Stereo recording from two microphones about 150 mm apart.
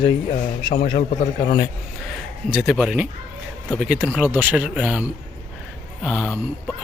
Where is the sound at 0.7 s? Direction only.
60° left (ahead or behind).